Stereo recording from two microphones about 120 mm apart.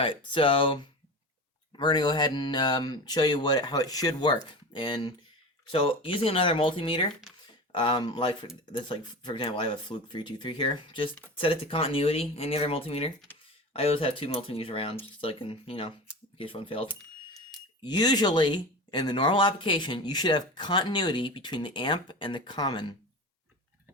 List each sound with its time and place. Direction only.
0.0 s speech: 45° left (ahead or behind)
17.8 s speech: 35° left (ahead or behind)